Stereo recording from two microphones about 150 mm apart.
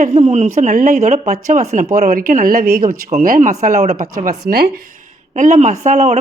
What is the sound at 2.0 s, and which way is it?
Speech, 70° right (ahead or behind).